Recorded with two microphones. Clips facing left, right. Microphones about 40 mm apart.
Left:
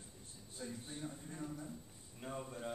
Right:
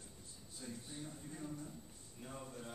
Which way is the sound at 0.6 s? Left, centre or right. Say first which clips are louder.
Left 3 dB; left.